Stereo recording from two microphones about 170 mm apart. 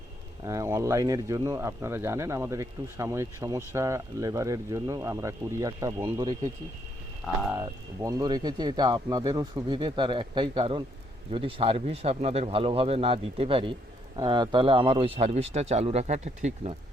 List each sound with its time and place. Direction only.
0.4 s speech: 15° right (ahead or behind)
7.5 s speech: 20° right (ahead or behind); by 16.7 s 40° right (ahead or behind)